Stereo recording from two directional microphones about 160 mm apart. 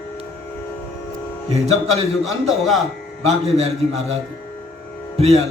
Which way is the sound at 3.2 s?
40° right (ahead or behind).